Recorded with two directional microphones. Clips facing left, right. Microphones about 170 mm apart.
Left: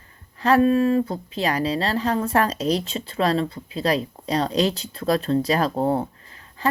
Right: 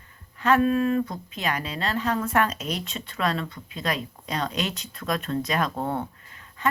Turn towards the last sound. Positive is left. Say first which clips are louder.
# left 6 dB
turn(degrees=30)  # may be behind; listen again after turning